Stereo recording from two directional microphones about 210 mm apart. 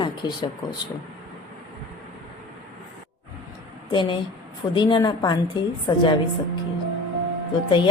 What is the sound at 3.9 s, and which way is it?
A woman's voice, 20° left (ahead or behind).